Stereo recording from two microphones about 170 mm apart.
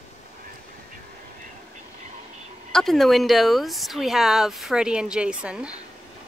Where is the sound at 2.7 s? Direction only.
Centre (ahead or behind).